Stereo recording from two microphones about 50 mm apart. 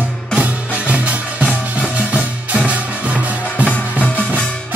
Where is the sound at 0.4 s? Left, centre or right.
Right.